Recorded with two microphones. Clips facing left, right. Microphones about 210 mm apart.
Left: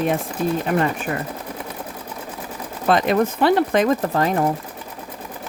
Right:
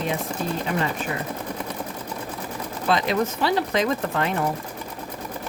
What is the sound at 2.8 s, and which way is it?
Speech, 50° left (ahead or behind).